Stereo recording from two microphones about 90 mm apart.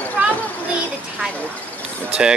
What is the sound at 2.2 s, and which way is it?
Speech, 10° right (ahead or behind).